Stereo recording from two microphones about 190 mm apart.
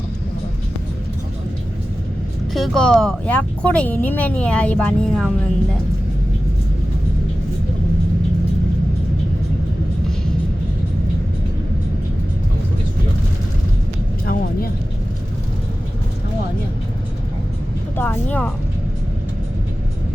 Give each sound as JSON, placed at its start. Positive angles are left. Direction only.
{"t": 2.5, "sound": "speech", "side_deg": 0}
{"t": 14.3, "sound": "vehicle", "side_deg": 50}
{"t": 17.9, "sound": "speech", "side_deg": 10}